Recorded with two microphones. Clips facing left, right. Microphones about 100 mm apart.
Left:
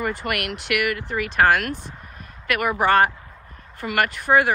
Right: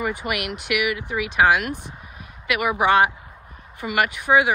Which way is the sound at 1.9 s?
10° right (ahead or behind).